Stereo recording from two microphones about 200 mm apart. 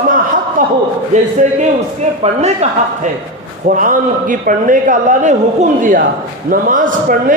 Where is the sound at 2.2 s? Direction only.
35° right (ahead or behind).